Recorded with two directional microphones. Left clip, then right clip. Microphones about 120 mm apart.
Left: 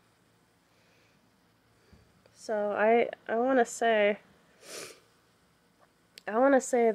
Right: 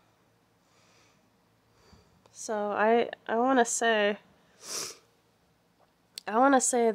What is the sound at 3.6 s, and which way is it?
Speech, 30° right (ahead or behind).